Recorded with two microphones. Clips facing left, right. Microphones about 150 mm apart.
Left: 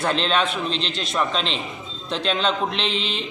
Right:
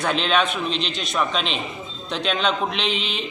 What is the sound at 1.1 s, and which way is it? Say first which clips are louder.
A man's voice: even; 5° right (ahead or behind).